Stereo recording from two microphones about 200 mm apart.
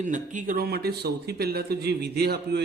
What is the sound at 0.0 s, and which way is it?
Speech, 40° right (ahead or behind).